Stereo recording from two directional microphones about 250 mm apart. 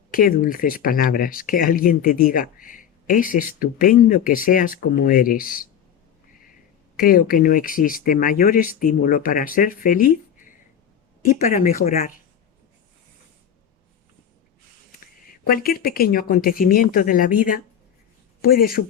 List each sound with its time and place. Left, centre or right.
0.1 s speech: left
7.0 s speech: left
15.0 s speech: left